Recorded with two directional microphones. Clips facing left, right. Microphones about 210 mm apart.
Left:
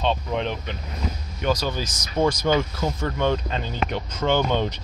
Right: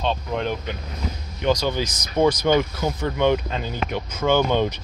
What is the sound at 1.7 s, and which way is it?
Speech, 20° right (ahead or behind).